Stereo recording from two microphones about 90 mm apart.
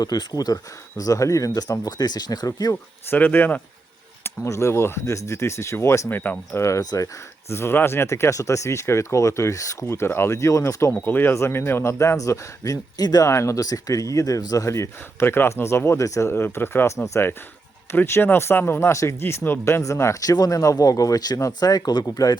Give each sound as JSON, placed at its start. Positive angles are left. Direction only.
{"t": 0.0, "sound": "speech", "side_deg": 50}
{"t": 3.1, "sound": "speech", "side_deg": 20}
{"t": 4.2, "sound": "speech", "side_deg": 35}
{"t": 6.1, "sound": "speech", "side_deg": 20}
{"t": 7.5, "sound": "speech", "side_deg": 25}
{"t": 13.3, "sound": "speech", "side_deg": 35}